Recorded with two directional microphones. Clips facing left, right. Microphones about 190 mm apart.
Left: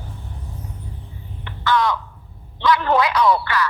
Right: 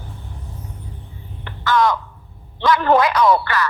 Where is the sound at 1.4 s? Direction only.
45° right (ahead or behind).